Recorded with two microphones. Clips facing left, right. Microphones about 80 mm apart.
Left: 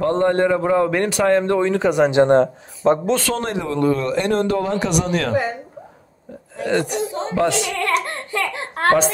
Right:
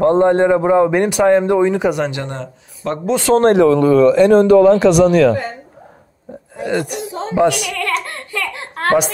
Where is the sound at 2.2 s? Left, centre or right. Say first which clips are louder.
Left 12 dB; left.